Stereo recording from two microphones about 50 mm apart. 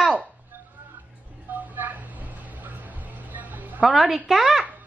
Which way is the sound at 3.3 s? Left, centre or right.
Right.